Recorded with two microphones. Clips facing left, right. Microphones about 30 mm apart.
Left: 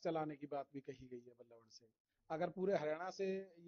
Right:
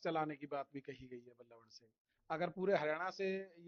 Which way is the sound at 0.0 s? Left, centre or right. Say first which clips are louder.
Right 2 dB; right.